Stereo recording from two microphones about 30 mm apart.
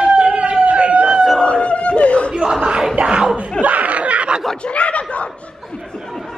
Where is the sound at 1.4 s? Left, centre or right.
Left.